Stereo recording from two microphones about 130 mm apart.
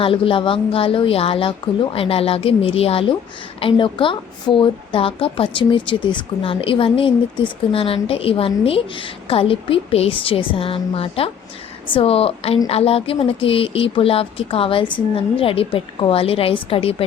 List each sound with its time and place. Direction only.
0.0 s a woman's voice: 45° left (ahead or behind)